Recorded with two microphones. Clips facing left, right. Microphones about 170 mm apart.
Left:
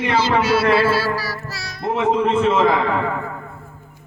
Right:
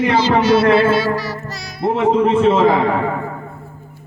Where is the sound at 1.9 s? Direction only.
30° right (ahead or behind).